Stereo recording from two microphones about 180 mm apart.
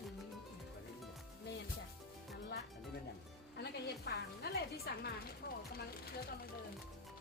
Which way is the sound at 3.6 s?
65° left (ahead or behind).